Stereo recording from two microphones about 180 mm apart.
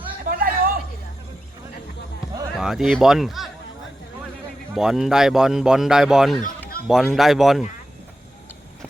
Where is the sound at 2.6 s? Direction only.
5° right (ahead or behind).